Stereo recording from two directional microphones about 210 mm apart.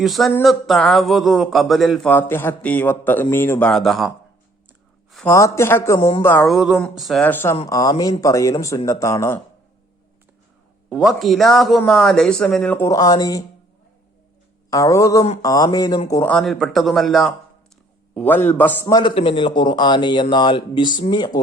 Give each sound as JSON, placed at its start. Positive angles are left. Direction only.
{"t": 0.0, "sound": "a man's voice", "side_deg": 0}
{"t": 5.1, "sound": "speech", "side_deg": 10}
{"t": 6.0, "sound": "a man's voice", "side_deg": 25}
{"t": 6.2, "sound": "a man's voice", "side_deg": 5}
{"t": 10.9, "sound": "a man's voice", "side_deg": 0}
{"t": 14.7, "sound": "a man's voice", "side_deg": 15}